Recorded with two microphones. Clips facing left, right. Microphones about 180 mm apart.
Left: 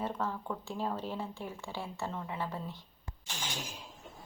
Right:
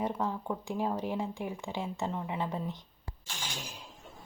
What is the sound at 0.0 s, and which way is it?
Speech, 15° right (ahead or behind).